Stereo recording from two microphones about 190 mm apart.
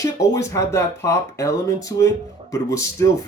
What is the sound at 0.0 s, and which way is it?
Speech, 15° left (ahead or behind).